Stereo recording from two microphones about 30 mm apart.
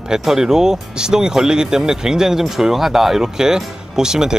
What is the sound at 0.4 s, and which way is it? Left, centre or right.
Speech, centre.